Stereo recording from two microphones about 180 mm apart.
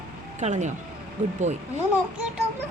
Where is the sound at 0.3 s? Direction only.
40° right (ahead or behind).